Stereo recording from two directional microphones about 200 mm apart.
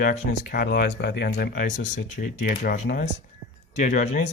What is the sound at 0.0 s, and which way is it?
Speech, 40° left (ahead or behind).